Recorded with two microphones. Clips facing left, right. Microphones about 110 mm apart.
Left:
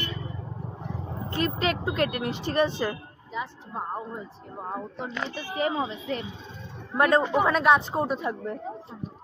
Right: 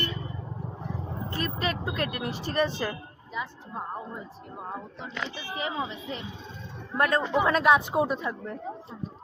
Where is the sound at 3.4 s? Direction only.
25° left (ahead or behind).